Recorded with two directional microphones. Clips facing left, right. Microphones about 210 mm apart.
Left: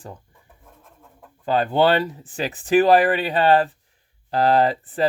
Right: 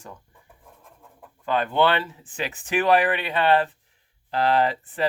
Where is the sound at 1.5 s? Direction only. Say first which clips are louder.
Left 3 dB; 35° left (ahead or behind).